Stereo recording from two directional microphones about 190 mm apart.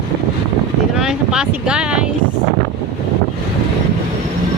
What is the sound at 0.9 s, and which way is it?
Speech, 5° right (ahead or behind).